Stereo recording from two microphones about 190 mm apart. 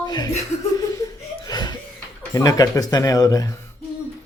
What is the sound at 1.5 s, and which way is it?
Laughter, 20° left (ahead or behind).